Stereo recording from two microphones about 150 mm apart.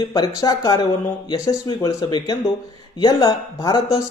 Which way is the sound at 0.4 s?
25° left (ahead or behind).